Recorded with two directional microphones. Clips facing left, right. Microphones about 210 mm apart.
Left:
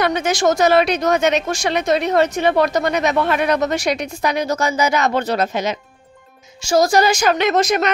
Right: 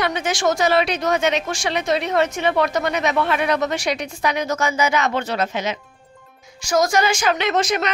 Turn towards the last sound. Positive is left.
turn(degrees=45)  # may be behind; listen again after turning